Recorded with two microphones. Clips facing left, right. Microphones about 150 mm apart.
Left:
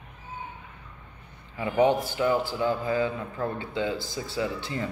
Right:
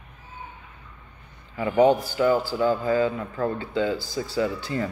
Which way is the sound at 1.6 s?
30° right (ahead or behind).